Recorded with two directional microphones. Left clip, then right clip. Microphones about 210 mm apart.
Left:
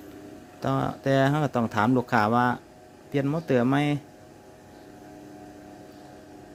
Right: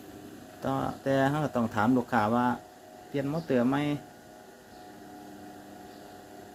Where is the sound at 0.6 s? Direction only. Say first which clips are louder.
Left 4 dB; 45° left (ahead or behind).